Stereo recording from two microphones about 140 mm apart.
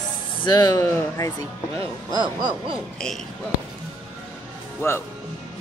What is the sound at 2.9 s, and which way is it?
Speech, 5° left (ahead or behind).